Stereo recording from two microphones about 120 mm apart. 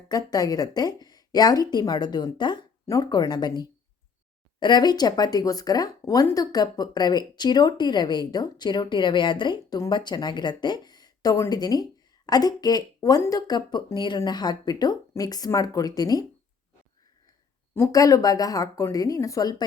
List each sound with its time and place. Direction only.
0.1 s speech: 30° left (ahead or behind)
17.7 s speech: 25° left (ahead or behind)